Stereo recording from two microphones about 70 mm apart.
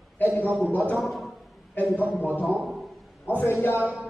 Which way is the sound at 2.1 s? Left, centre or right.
Left.